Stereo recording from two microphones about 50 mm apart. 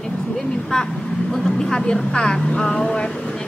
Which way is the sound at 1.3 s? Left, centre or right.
Centre.